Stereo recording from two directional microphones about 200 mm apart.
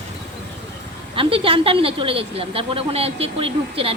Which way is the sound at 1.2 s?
25° right (ahead or behind).